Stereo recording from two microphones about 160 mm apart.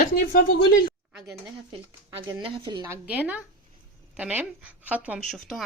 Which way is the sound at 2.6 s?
25° right (ahead or behind).